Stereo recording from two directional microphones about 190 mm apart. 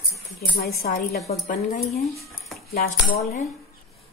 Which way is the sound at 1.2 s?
40° left (ahead or behind).